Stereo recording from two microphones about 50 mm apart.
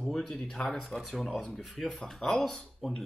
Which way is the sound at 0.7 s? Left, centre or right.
Centre.